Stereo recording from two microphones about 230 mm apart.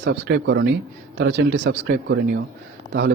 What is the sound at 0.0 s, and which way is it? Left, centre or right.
Speech, right.